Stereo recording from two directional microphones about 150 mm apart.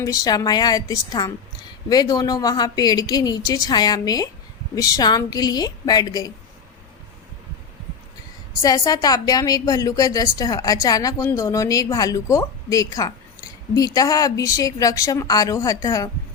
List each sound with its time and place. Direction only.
0.0 s a woman's voice: 25° left (ahead or behind)
8.6 s a woman's voice: 25° left (ahead or behind)